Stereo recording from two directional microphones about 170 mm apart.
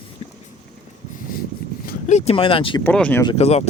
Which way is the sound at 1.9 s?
45° left (ahead or behind).